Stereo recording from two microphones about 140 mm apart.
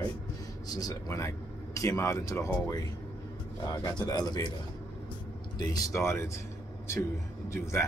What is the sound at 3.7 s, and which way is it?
Speech, 30° left (ahead or behind).